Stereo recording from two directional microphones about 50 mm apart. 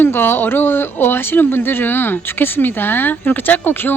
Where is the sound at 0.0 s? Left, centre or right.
Left.